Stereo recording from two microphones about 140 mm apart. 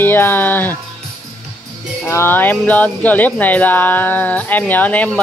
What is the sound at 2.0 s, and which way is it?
Speech, 15° left (ahead or behind).